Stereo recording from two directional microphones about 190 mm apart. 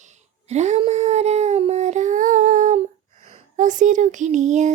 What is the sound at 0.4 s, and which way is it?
Child singing, 35° right (ahead or behind).